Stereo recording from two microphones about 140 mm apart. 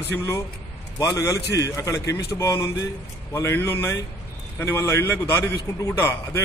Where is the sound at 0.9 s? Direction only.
25° left (ahead or behind).